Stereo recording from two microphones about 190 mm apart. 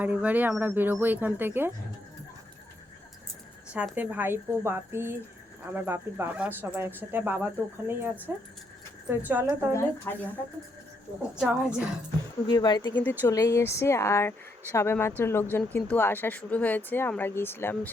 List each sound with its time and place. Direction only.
0.0 s speech: 10° right (ahead or behind)
3.7 s speech: 5° right (ahead or behind)
9.7 s speech: 10° left (ahead or behind)
11.3 s a woman's voice: 5° right (ahead or behind)
12.5 s speech: 25° left (ahead or behind)
12.9 s speech: 10° left (ahead or behind)